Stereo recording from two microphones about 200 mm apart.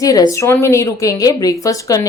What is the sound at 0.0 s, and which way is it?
A woman's voice, 15° left (ahead or behind).